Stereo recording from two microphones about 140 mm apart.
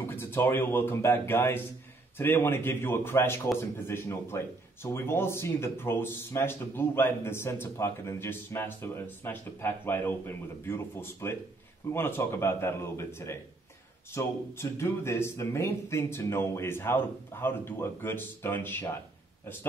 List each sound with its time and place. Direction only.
0.0 s speech: 15° left (ahead or behind)